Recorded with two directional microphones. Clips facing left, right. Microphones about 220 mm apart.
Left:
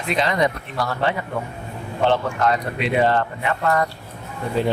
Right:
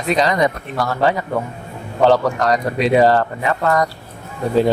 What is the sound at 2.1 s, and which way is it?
A man's voice, 40° right (ahead or behind).